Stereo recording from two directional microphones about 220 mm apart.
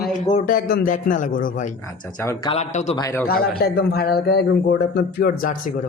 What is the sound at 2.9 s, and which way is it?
Speech, 15° left (ahead or behind).